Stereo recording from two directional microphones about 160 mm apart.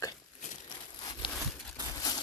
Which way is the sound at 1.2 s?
30° left (ahead or behind).